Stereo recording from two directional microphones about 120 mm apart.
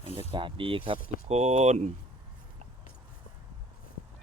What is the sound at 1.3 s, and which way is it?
Speech, 65° right (ahead or behind).